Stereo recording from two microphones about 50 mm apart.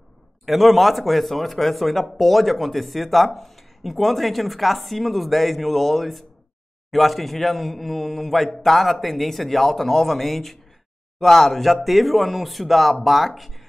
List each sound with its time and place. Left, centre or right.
0.5 s speech: centre